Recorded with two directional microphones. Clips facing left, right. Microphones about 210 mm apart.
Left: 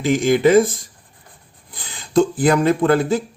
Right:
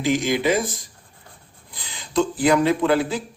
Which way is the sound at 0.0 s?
50° left (ahead or behind).